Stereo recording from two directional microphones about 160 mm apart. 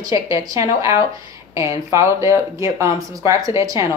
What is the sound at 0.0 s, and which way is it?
Speech, 20° right (ahead or behind).